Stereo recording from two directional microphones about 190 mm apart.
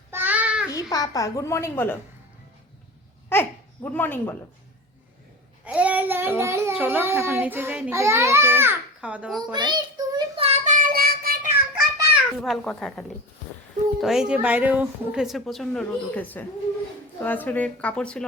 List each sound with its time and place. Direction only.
0.1 s child singing: 10° right (ahead or behind)
0.7 s a child's voice: 20° left (ahead or behind)
3.3 s a child's voice: 10° left (ahead or behind)
5.6 s a child's voice: 5° right (ahead or behind)
9.5 s child singing: 25° right (ahead or behind); by 11.3 s 50° right (ahead or behind)
11.7 s a sound: 10° right (ahead or behind)
12.4 s a woman's voice: centre (ahead or behind)